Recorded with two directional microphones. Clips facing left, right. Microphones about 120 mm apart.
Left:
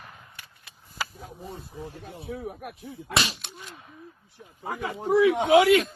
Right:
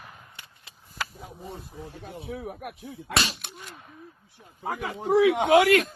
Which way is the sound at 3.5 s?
Centre (ahead or behind).